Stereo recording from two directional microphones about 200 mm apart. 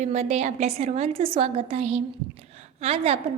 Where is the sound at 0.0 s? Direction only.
35° right (ahead or behind).